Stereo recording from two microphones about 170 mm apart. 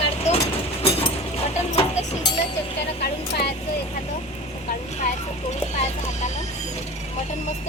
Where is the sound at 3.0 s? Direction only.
70° left (ahead or behind).